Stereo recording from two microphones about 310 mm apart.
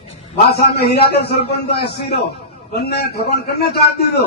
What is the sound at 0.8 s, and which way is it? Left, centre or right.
Speech, left.